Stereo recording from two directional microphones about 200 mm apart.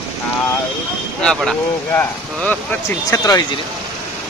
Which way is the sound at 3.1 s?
15° left (ahead or behind).